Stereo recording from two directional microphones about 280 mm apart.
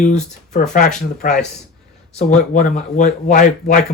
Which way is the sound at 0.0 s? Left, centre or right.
Left.